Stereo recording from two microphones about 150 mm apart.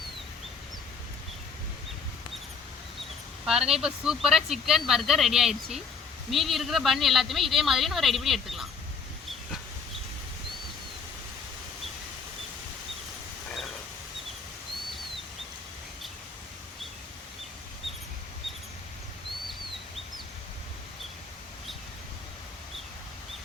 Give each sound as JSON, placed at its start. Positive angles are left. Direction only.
{"t": 3.4, "sound": "speech", "side_deg": -5}